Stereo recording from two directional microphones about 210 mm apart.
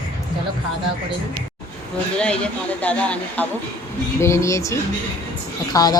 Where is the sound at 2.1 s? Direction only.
5° left (ahead or behind).